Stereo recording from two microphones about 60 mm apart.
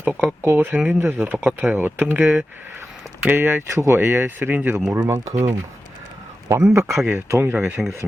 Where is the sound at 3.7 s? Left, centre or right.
Right.